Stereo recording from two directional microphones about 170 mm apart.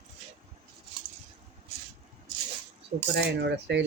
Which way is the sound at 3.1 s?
85° right.